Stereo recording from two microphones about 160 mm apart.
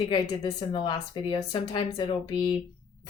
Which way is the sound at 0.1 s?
25° left (ahead or behind).